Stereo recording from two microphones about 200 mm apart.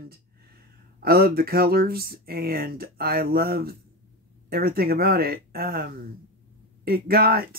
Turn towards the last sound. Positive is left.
turn(degrees=-45)  # may be behind; listen again after turning